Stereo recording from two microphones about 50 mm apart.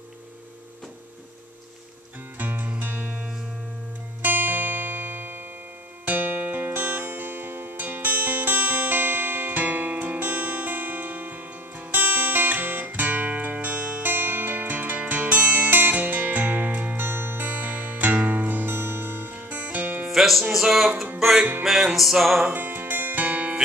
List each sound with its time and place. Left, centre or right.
2.3 s music: right
20.1 s music: centre
22.5 s music: right